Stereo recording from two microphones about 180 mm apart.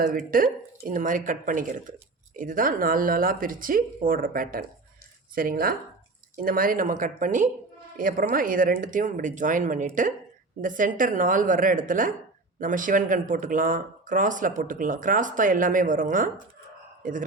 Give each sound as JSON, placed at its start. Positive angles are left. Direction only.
{"t": 0.3, "sound": "speech", "side_deg": -50}